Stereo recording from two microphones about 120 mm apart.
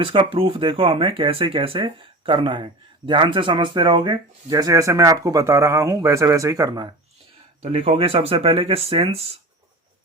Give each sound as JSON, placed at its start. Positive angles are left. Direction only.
{"t": 0.0, "sound": "speech", "side_deg": -50}
{"t": 7.6, "sound": "speech", "side_deg": -60}